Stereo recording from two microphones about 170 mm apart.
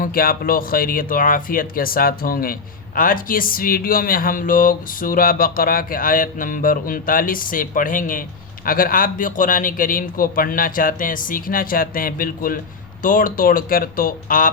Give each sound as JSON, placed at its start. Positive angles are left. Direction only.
{"t": 0.0, "sound": "speech", "side_deg": 60}